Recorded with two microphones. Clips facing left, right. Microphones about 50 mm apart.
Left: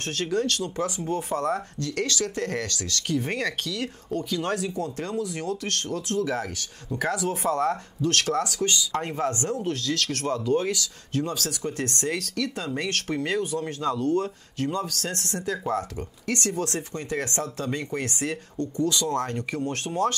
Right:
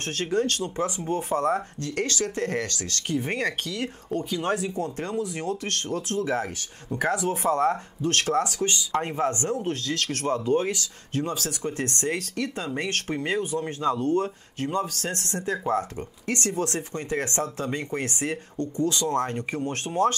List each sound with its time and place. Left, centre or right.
0.0 s speech: right
8.9 s speech: centre